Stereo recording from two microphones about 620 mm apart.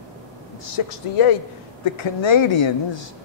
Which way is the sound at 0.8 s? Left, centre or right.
Left.